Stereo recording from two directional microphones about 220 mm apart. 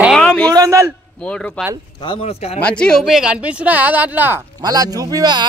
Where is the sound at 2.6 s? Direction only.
5° left (ahead or behind).